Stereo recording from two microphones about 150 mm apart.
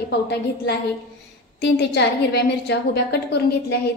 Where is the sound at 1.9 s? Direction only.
90° left.